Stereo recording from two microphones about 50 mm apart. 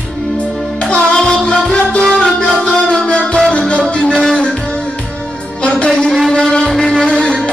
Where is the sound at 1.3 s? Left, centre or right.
Centre.